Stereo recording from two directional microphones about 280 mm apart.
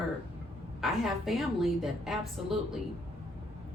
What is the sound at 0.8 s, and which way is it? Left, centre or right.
A woman's voice, centre.